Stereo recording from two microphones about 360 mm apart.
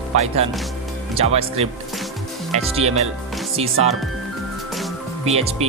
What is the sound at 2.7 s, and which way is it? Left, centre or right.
Speech, centre.